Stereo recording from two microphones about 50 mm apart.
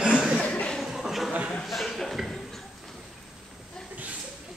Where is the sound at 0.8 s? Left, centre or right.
Centre.